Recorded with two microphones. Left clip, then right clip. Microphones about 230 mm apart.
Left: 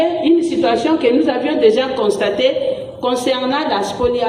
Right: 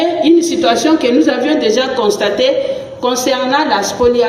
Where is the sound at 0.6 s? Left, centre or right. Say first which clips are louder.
Right 3 dB; right.